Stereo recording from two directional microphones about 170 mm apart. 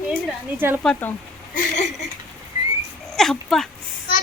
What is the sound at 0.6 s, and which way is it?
Speech, 15° right (ahead or behind).